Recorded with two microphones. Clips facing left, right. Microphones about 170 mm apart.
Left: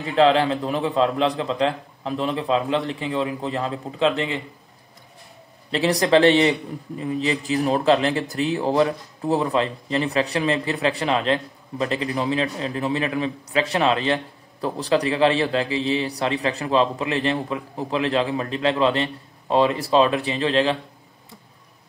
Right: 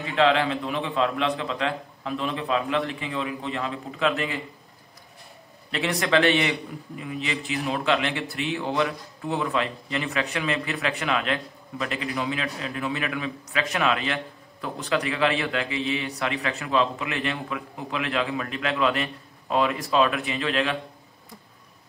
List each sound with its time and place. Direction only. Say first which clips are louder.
0.0 s speech: left 4 dB; 30° left (ahead or behind)
5.7 s speech: left 6 dB; 35° left (ahead or behind)